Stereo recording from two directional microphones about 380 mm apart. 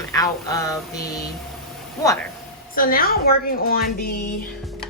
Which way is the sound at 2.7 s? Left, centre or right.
Left.